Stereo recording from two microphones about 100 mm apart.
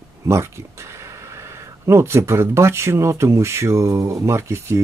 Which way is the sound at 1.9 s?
25° right (ahead or behind).